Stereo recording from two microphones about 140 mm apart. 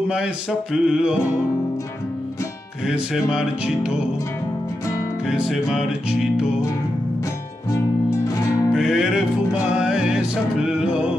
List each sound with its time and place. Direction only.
0.1 s music: 5° right (ahead or behind)
2.9 s music: 5° right (ahead or behind)
5.3 s music: 5° right (ahead or behind)
7.7 s music: 20° left (ahead or behind)
8.7 s music: 5° right (ahead or behind)